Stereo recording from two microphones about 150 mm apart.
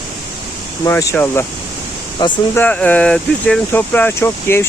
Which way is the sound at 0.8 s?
15° left (ahead or behind).